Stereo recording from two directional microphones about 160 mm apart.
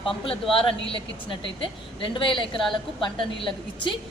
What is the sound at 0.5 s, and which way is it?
A woman's voice, 35° left (ahead or behind).